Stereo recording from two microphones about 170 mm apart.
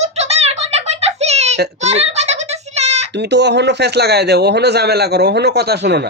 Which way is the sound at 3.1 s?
90° right.